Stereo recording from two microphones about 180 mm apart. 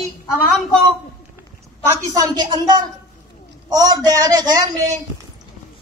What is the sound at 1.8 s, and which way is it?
A man's voice, 20° right (ahead or behind).